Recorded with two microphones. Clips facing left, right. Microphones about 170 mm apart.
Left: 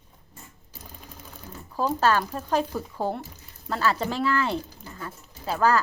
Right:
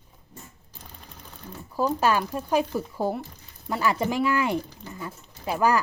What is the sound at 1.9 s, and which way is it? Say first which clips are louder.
Speech: even; 10° right (ahead or behind).